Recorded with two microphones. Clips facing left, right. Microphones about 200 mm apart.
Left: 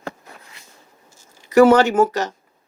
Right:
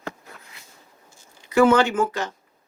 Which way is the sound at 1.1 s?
40° left (ahead or behind).